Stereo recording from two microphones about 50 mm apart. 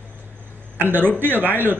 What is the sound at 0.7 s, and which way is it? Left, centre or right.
A man's voice, right.